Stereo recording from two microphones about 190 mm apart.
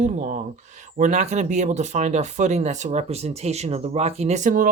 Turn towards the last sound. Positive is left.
turn(degrees=-45)  # may be behind; listen again after turning